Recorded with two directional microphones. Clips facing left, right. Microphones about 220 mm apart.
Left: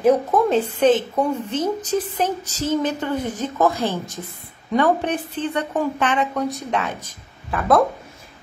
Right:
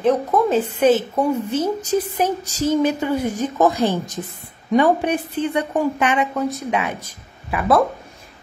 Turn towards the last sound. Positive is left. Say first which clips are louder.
# even
turn(degrees=-5)  # may be behind; listen again after turning